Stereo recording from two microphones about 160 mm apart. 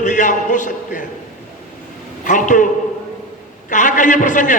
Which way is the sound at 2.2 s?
50° left (ahead or behind).